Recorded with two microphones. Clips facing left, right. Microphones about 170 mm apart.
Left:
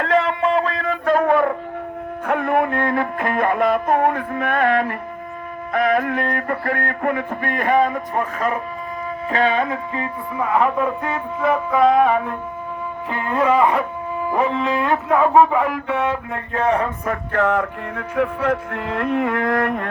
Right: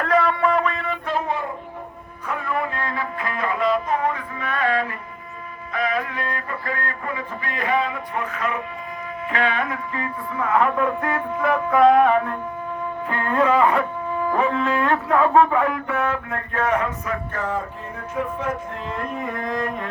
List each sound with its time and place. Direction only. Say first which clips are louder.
0.0 s a sound: left 1 dB; 25° left (ahead or behind); by 1.5 s 60° left (ahead or behind)
2.2 s music: left 7 dB; 60° left (ahead or behind); by 8.6 s 40° left (ahead or behind)
9.3 s music: left 5 dB; 30° left (ahead or behind)
11.7 s speech: right 1 dB; 5° left (ahead or behind)
17.3 s music: left 7 dB; 70° left (ahead or behind)